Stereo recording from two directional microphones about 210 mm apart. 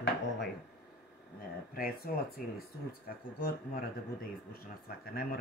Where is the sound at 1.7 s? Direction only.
45° left (ahead or behind).